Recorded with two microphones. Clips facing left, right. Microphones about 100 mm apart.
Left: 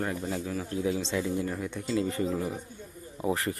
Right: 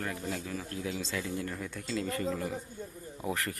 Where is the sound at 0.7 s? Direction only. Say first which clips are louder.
Left 9 dB; 20° left (ahead or behind).